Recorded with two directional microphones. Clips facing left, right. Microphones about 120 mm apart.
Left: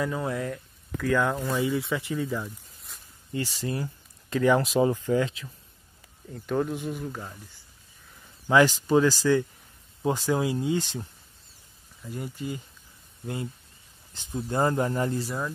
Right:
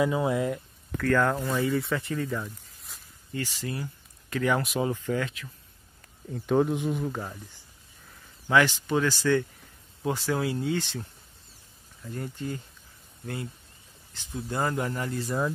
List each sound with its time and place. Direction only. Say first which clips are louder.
0.0 s speech: right 4 dB; 15° right (ahead or behind)
0.9 s speech: right 1 dB; 5° left (ahead or behind)
3.3 s speech: left 3 dB; 25° left (ahead or behind)
6.4 s speech: right 4 dB; 10° right (ahead or behind)
8.6 s speech: left 5 dB; 35° left (ahead or behind)
9.0 s speech: left 2 dB; 15° left (ahead or behind)
14.1 s speech: left 3 dB; 25° left (ahead or behind)
15.2 s speech: right 4 dB; centre (ahead or behind)